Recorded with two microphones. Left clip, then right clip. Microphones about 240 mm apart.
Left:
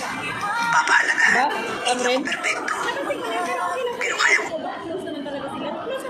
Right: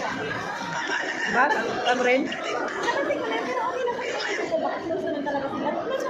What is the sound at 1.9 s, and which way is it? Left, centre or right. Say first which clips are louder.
Speech: left 1 dB; left.